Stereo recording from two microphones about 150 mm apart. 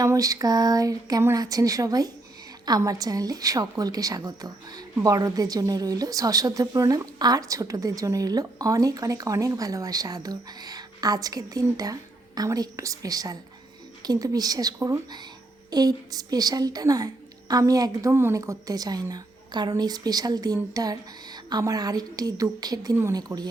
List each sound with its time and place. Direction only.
0.0 s a woman's voice: 25° right (ahead or behind)